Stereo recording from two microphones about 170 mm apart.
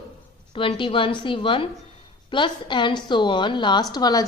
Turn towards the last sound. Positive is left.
turn(degrees=25)  # may be behind; listen again after turning